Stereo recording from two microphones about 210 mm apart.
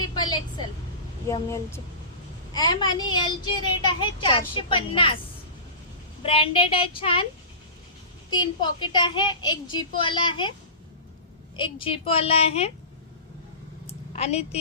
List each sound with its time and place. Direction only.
0.1 s vehicle: 20° left (ahead or behind)
1.3 s a child's voice: 15° left (ahead or behind)
6.2 s a child's voice: 25° left (ahead or behind)
8.4 s a child's voice: 20° left (ahead or behind)
11.5 s a child's voice: 25° left (ahead or behind)
14.1 s speech: 30° left (ahead or behind)